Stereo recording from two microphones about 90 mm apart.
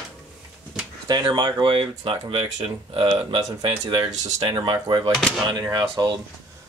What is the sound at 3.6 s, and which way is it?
Speech, 55° right (ahead or behind).